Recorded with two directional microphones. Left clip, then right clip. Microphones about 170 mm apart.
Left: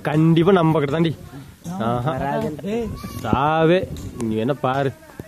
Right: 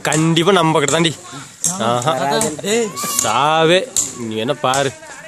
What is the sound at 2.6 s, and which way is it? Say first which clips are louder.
Speech: right 8 dB; 70° right (ahead or behind).